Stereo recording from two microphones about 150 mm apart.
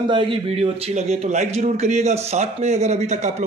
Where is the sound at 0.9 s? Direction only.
50° right (ahead or behind).